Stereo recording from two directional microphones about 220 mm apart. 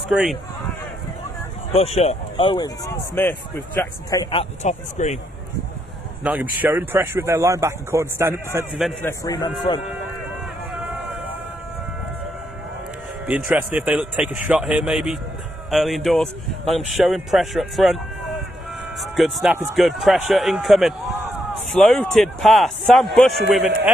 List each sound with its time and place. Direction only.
0.1 s speech: 5° right (ahead or behind)
1.7 s speech: 30° left (ahead or behind)
6.2 s speech: 5° right (ahead or behind)
8.7 s speech: centre (ahead or behind)
9.0 s a man's voice: 15° left (ahead or behind)
13.2 s speech: 10° right (ahead or behind)